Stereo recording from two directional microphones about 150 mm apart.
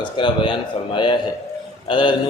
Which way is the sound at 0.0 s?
30° left (ahead or behind).